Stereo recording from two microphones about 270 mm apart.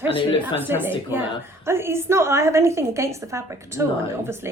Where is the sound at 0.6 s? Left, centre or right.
Centre.